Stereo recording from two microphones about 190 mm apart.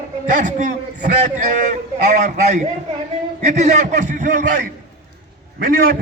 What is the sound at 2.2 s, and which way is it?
A man's voice, 40° right (ahead or behind).